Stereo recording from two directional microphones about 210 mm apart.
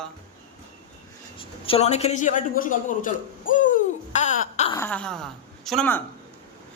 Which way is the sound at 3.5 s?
40° left (ahead or behind).